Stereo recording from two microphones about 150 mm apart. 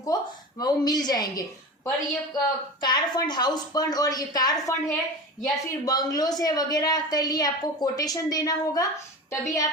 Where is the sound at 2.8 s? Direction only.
30° left (ahead or behind).